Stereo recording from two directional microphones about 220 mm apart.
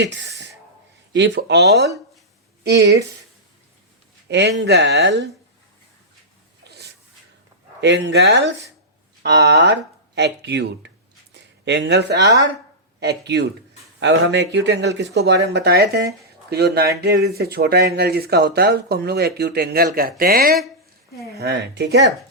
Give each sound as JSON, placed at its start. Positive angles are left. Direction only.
{"t": 0.0, "sound": "speech", "side_deg": -55}
{"t": 4.3, "sound": "speech", "side_deg": -50}
{"t": 6.7, "sound": "a sound", "side_deg": -45}
{"t": 7.8, "sound": "speech", "side_deg": -55}